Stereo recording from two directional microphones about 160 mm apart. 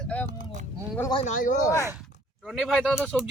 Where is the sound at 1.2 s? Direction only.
50° left (ahead or behind).